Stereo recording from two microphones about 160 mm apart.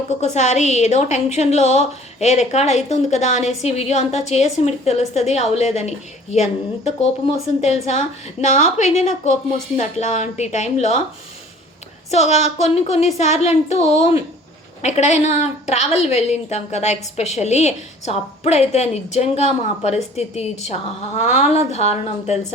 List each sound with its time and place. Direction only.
0.2 s a woman's voice: 45° left (ahead or behind)
7.6 s a woman's voice: 45° left (ahead or behind)
12.1 s a woman's voice: 45° left (ahead or behind)